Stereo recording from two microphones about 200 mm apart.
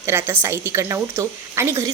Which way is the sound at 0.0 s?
10° right (ahead or behind).